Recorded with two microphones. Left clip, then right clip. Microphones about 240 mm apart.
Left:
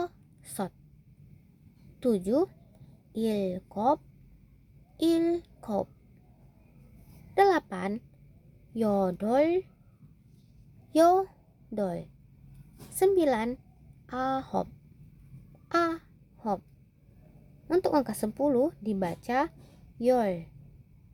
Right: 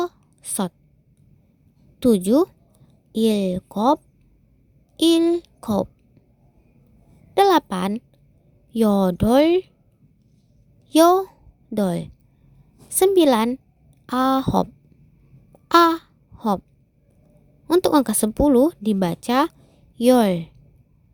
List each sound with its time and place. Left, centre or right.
0.0 s a sound: right
2.0 s a woman's voice: right
4.9 s speech: right
7.3 s a woman's voice: right
10.8 s a woman's voice: right
15.7 s babbling: right
17.7 s a woman's voice: right